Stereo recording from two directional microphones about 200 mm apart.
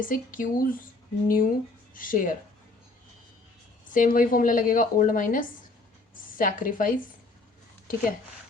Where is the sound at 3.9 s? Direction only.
40° left (ahead or behind).